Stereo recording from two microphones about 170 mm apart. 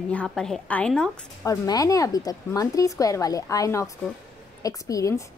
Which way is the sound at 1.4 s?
20° left (ahead or behind).